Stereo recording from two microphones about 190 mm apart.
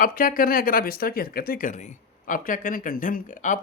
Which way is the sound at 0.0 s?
50° left (ahead or behind).